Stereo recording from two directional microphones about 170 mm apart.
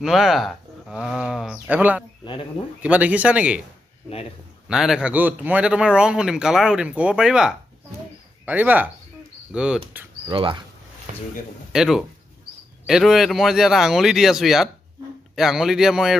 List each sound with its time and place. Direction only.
0.0 s a man's voice: centre (ahead or behind)
4.6 s a man's voice: 5° right (ahead or behind)
10.2 s speech: 30° right (ahead or behind)
11.7 s speech: 5° right (ahead or behind)